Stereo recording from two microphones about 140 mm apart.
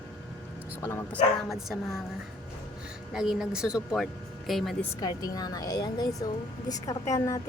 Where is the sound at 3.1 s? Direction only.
5° right (ahead or behind).